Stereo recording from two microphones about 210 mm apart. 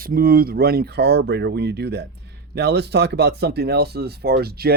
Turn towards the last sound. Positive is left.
turn(degrees=-50)  # may be behind; listen again after turning